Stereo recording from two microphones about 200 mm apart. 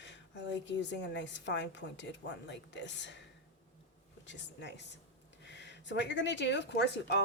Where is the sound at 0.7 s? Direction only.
60° left (ahead or behind).